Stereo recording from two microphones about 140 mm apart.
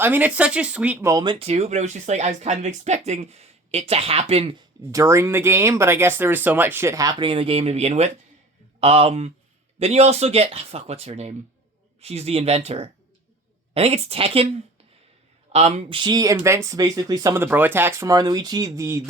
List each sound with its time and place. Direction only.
0.0 s speech: 10° right (ahead or behind)
1.0 s speech: 30° right (ahead or behind)
1.5 s speech: 50° right (ahead or behind)
4.8 s speech: 20° right (ahead or behind); by 14.4 s 40° right (ahead or behind)
15.5 s speech: 50° right (ahead or behind)
16.0 s speech: 30° right (ahead or behind)